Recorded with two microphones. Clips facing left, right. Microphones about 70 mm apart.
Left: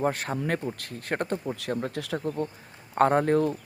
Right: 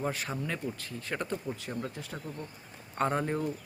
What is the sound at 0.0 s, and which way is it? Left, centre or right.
Speech, left.